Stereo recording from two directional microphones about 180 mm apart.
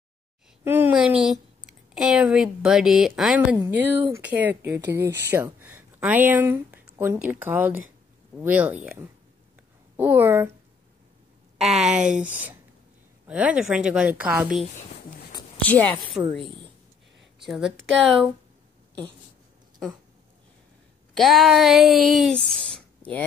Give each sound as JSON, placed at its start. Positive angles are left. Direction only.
{"t": 0.7, "sound": "speech", "side_deg": -10}
{"t": 9.9, "sound": "speech", "side_deg": -10}
{"t": 11.5, "sound": "a sound", "side_deg": 0}
{"t": 12.0, "sound": "speech", "side_deg": -45}
{"t": 12.3, "sound": "speech", "side_deg": -10}
{"t": 15.6, "sound": "a woman's voice", "side_deg": 10}
{"t": 21.2, "sound": "speech", "side_deg": 0}
{"t": 22.4, "sound": "speech", "side_deg": -30}
{"t": 22.8, "sound": "a sound", "side_deg": 10}